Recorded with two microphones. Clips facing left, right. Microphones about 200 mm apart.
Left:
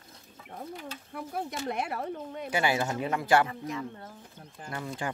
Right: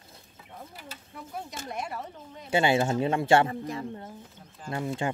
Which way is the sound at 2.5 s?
25° right (ahead or behind).